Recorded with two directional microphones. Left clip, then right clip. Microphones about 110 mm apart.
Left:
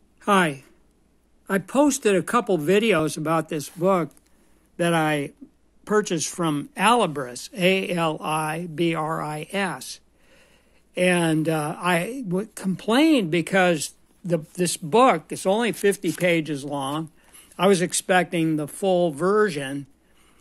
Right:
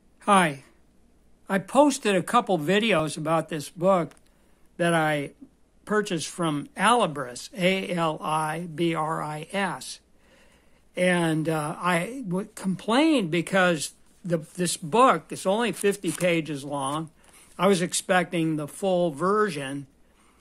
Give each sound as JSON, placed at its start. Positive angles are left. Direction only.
{"t": 0.2, "sound": "speech", "side_deg": 15}